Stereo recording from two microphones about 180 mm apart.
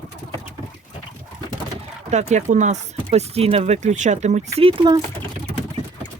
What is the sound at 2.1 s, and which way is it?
Speech, 40° right (ahead or behind).